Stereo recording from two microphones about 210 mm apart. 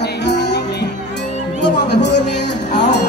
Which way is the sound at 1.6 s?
55° left (ahead or behind).